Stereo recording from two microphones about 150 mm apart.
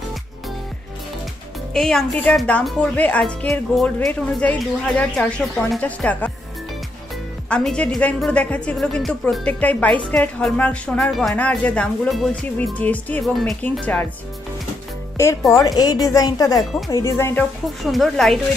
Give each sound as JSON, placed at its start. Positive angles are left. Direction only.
{"t": 1.7, "sound": "a woman's voice", "side_deg": 5}
{"t": 7.4, "sound": "a woman's voice", "side_deg": 5}
{"t": 15.2, "sound": "a woman's voice", "side_deg": 20}
{"t": 17.9, "sound": "speech", "side_deg": 0}